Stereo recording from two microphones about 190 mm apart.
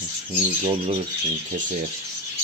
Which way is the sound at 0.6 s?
30° right (ahead or behind).